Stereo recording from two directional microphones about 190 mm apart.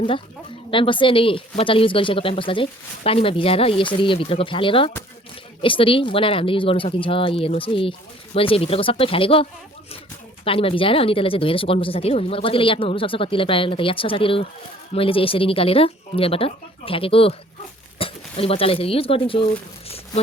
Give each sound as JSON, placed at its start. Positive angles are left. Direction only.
{"t": 0.7, "sound": "speech", "side_deg": 25}